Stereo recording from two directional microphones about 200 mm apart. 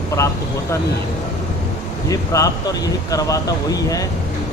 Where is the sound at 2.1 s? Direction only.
15° left (ahead or behind).